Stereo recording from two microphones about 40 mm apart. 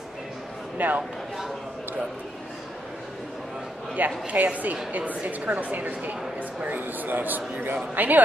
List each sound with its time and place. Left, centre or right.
0.7 s a man's voice: right
4.3 s a man's voice: right